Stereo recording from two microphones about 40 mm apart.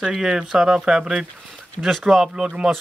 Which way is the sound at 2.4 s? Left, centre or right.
Right.